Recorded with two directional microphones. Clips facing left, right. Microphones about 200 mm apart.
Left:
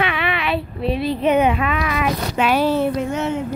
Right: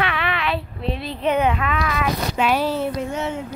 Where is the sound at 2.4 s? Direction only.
70° left (ahead or behind).